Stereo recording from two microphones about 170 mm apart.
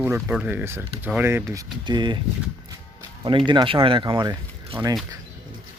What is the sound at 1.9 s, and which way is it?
Speech, 25° right (ahead or behind).